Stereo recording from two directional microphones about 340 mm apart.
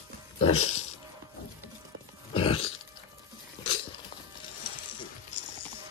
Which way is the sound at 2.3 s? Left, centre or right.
Centre.